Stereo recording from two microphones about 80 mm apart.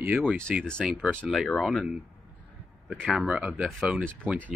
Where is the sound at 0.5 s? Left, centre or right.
Centre.